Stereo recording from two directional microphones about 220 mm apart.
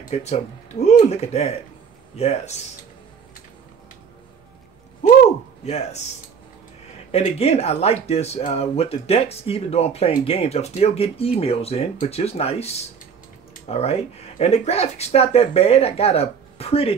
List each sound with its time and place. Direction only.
0.0 s speech: 30° left (ahead or behind)
7.1 s speech: 25° left (ahead or behind)